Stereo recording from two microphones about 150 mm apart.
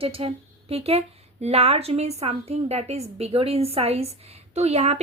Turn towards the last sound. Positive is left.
turn(degrees=-45)  # may be behind; listen again after turning